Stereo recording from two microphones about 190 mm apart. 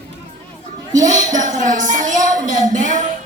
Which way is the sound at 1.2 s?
40° right (ahead or behind).